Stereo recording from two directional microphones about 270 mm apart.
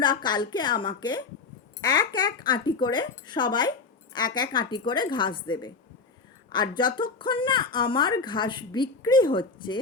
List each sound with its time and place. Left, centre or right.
0.0 s a woman's voice: centre